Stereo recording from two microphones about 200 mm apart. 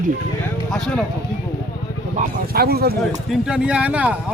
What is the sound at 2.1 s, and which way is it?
Speech, 50° right (ahead or behind).